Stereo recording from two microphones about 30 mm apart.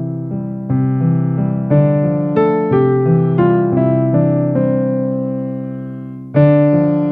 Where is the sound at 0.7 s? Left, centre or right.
Centre.